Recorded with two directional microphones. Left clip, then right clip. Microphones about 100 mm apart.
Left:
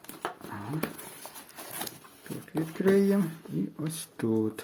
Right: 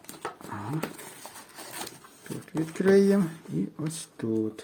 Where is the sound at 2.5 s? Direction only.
40° right (ahead or behind).